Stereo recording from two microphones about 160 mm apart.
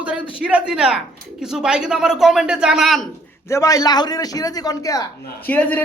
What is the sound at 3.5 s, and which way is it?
Speech, 20° left (ahead or behind).